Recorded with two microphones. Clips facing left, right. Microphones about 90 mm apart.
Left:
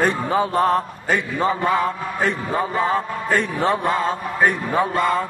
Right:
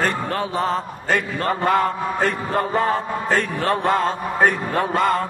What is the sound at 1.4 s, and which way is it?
Mantra, 65° right (ahead or behind).